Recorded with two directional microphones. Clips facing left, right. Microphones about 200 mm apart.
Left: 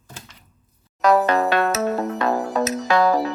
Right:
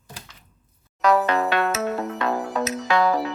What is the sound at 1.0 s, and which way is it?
Music, 40° left (ahead or behind).